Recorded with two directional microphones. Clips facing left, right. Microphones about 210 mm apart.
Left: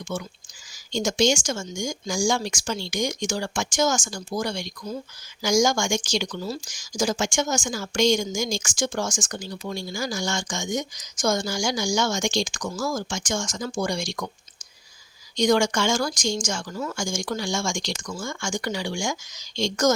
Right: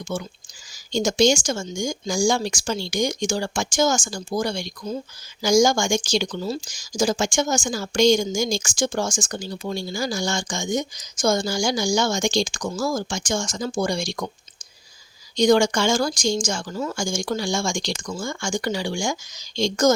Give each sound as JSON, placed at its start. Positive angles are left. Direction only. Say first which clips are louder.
{"t": 0.1, "sound": "speech", "louder": "right 2 dB", "side_deg": -30}
{"t": 15.4, "sound": "speech", "louder": "right 3 dB", "side_deg": -30}